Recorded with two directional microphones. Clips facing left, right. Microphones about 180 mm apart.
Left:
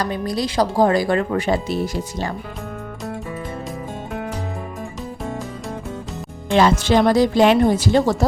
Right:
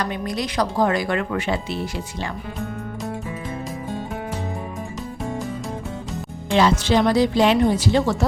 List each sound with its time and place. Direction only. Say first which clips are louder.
0.0 s speech: left 3 dB; 35° left (ahead or behind)
6.5 s speech: left 2 dB; 50° left (ahead or behind)